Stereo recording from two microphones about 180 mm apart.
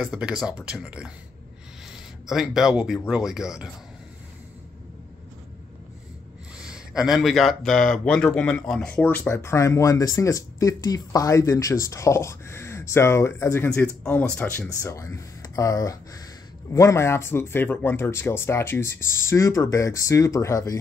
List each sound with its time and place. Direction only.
0.0 s speech: 5° right (ahead or behind)
2.2 s speech: centre (ahead or behind)
6.6 s speech: 5° right (ahead or behind); by 20.8 s 15° left (ahead or behind)